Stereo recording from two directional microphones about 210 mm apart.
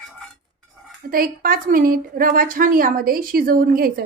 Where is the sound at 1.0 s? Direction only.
45° right (ahead or behind).